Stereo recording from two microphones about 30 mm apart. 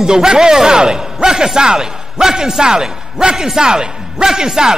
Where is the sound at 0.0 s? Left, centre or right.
Right.